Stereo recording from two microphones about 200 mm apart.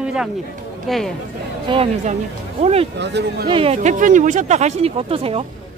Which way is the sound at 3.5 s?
30° right (ahead or behind).